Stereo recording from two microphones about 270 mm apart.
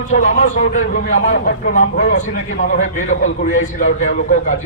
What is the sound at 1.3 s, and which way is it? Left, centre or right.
Speech, left.